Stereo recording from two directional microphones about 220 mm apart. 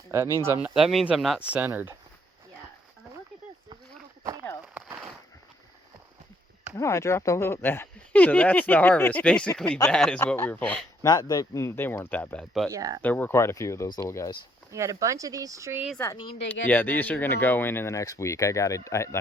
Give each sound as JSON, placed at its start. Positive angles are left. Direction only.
{"t": 0.1, "sound": "speech", "side_deg": -10}
{"t": 4.7, "sound": "a sound", "side_deg": -5}
{"t": 6.7, "sound": "speech", "side_deg": 10}
{"t": 11.0, "sound": "speech", "side_deg": 15}
{"t": 12.7, "sound": "speech", "side_deg": -15}
{"t": 13.0, "sound": "speech", "side_deg": 10}
{"t": 14.7, "sound": "speech", "side_deg": -15}
{"t": 16.0, "sound": "speech", "side_deg": 20}
{"t": 16.5, "sound": "speech", "side_deg": 10}